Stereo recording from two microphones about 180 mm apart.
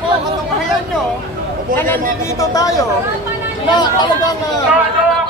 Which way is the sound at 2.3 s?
20° left (ahead or behind).